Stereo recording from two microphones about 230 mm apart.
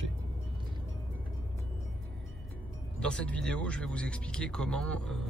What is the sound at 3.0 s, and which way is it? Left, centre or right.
Speech, centre.